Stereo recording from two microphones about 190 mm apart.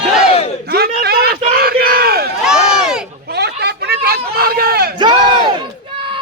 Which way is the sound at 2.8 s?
5° right (ahead or behind).